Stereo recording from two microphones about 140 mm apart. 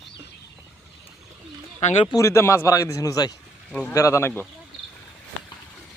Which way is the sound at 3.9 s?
20° left (ahead or behind).